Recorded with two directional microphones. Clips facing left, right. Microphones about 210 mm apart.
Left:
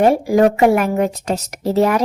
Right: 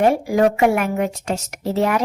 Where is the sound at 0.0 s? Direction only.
35° left (ahead or behind).